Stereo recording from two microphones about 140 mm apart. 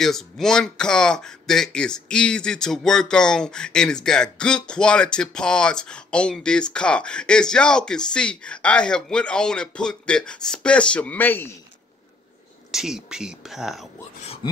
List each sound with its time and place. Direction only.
0.0 s speech: 5° left (ahead or behind)
12.7 s speech: 5° right (ahead or behind)